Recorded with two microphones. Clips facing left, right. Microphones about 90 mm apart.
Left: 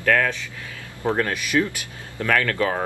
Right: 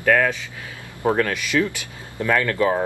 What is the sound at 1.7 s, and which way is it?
Speech, 25° right (ahead or behind).